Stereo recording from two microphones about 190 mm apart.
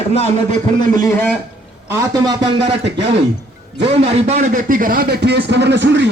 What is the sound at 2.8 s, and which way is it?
Speech, 65° right (ahead or behind).